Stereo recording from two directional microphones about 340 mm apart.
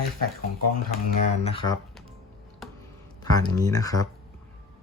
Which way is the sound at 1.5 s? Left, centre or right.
Centre.